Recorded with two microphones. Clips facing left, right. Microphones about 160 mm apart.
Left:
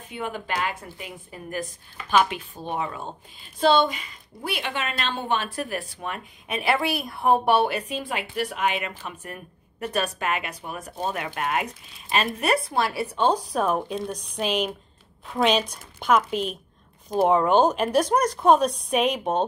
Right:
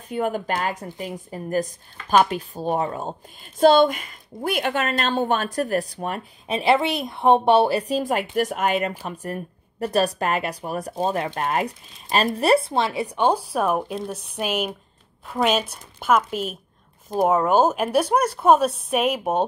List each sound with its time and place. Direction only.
0.1 s a woman's voice: 45° right (ahead or behind); by 19.4 s 5° right (ahead or behind)